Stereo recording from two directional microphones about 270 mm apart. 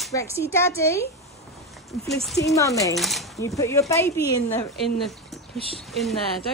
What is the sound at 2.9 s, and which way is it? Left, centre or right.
Speech, centre.